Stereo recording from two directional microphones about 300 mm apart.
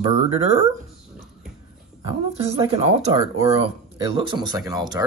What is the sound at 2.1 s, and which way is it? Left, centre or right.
Speech, centre.